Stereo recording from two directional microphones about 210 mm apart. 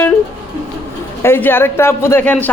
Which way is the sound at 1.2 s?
10° left (ahead or behind).